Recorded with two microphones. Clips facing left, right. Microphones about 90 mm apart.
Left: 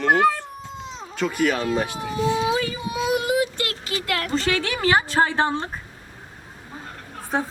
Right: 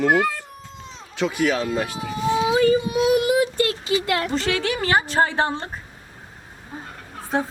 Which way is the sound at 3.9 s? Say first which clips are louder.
Right 5 dB; 20° right (ahead or behind).